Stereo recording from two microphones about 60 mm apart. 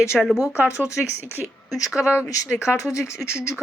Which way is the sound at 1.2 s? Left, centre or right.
Right.